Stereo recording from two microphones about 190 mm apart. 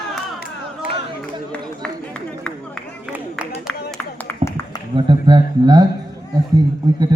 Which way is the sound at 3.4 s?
5° right (ahead or behind).